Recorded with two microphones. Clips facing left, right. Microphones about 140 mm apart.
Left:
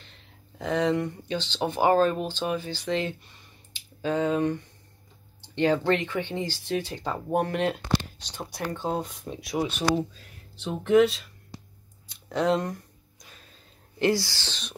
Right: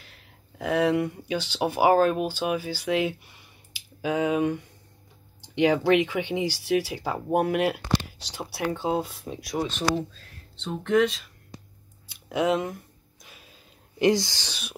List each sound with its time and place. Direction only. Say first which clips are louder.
0.0 s speech: even; 5° right (ahead or behind)
12.1 s a sound: even; 5° right (ahead or behind)
13.9 s speech: right 3 dB; 20° right (ahead or behind)